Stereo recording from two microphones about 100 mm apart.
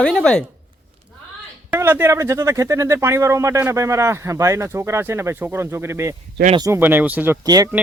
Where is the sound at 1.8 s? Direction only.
25° right (ahead or behind).